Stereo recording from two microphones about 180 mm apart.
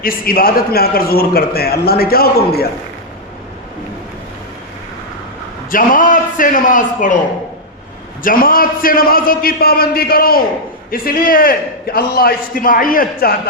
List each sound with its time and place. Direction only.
0.0 s a man's voice: 55° left (ahead or behind)
5.7 s a man's voice: 50° left (ahead or behind)
8.2 s a man's voice: 50° left (ahead or behind)